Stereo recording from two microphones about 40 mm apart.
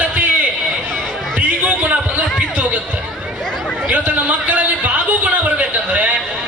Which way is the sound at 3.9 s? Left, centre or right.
Right.